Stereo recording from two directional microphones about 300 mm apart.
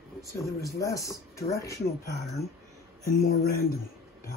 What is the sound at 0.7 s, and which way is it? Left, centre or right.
Speech, centre.